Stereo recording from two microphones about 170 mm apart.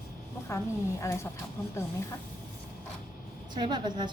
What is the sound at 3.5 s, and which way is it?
Speech, 25° right (ahead or behind).